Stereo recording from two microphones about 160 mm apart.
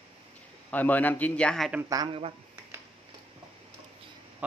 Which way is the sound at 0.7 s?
10° left (ahead or behind).